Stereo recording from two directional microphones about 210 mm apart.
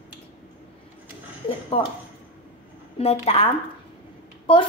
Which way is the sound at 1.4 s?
25° left (ahead or behind).